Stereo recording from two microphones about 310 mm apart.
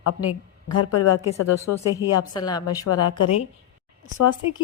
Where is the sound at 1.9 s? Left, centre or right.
Centre.